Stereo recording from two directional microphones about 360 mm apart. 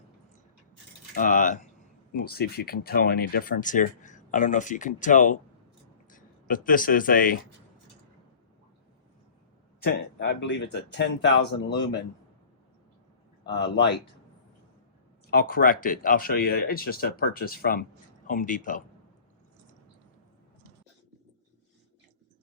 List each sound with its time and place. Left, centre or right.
1.1 s speech: left
10.2 s speech: left
13.4 s speech: left
15.3 s speech: left